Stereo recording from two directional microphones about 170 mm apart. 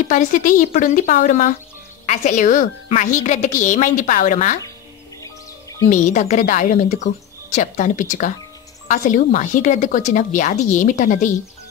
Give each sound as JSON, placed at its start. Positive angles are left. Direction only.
{"t": 0.1, "sound": "a woman's voice", "side_deg": 45}
{"t": 5.2, "sound": "music", "side_deg": 20}
{"t": 5.9, "sound": "a woman's voice", "side_deg": 45}